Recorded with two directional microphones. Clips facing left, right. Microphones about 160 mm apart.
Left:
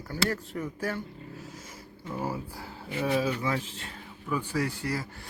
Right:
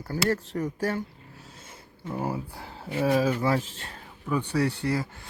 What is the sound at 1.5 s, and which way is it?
Speech, 25° right (ahead or behind).